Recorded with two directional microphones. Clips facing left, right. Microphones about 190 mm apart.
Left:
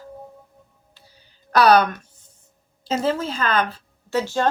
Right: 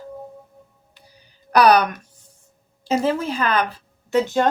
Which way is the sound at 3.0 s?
15° right (ahead or behind).